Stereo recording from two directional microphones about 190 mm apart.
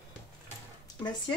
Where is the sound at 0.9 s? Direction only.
20° left (ahead or behind).